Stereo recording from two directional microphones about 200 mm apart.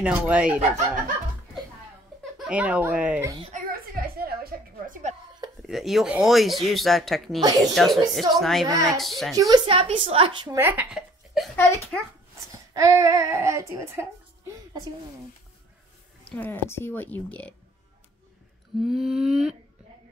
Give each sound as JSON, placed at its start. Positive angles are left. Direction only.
{"t": 0.0, "sound": "speech", "side_deg": -5}
{"t": 2.3, "sound": "speech", "side_deg": -5}
{"t": 3.5, "sound": "music", "side_deg": -45}
{"t": 5.7, "sound": "speech", "side_deg": 0}
{"t": 8.6, "sound": "speech", "side_deg": -15}
{"t": 8.9, "sound": "speech", "side_deg": 0}
{"t": 9.3, "sound": "speech", "side_deg": -15}
{"t": 9.7, "sound": "a woman's voice", "side_deg": -30}
{"t": 11.5, "sound": "a woman's voice", "side_deg": 15}
{"t": 12.5, "sound": "speech", "side_deg": -15}
{"t": 16.3, "sound": "a woman's voice", "side_deg": 10}
{"t": 18.8, "sound": "speech", "side_deg": 0}